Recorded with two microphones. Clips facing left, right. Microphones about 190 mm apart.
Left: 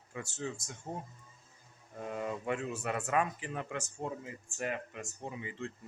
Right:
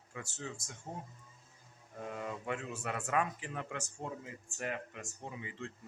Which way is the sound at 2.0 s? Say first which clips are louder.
Left 4 dB; 20° left (ahead or behind).